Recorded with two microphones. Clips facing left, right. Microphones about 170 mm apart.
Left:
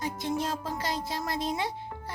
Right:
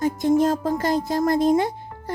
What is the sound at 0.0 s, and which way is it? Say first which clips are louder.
Speech: right 12 dB; 45° right (ahead or behind).